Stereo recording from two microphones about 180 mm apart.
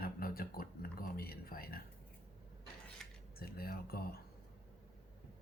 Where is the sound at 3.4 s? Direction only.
60° left (ahead or behind).